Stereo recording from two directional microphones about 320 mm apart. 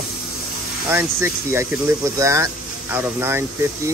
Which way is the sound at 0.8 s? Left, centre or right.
Centre.